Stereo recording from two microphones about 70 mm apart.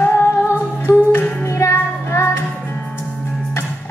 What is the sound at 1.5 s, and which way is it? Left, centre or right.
Music, left.